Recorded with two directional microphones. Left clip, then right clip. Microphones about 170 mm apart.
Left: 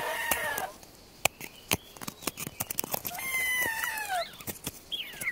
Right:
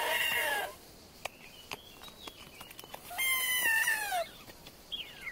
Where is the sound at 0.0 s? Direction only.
45° right (ahead or behind).